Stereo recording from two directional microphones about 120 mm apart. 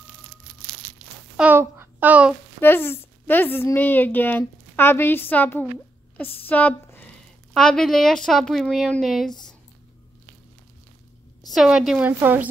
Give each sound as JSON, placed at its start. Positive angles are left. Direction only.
{"t": 1.3, "sound": "a sound", "side_deg": -10}
{"t": 1.6, "sound": "child singing", "side_deg": -15}
{"t": 2.6, "sound": "a woman's voice", "side_deg": 20}
{"t": 11.5, "sound": "a woman's voice", "side_deg": -5}
{"t": 12.1, "sound": "a woman's voice", "side_deg": -15}